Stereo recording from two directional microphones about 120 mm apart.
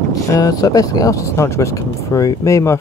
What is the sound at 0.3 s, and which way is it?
Speech, 30° left (ahead or behind).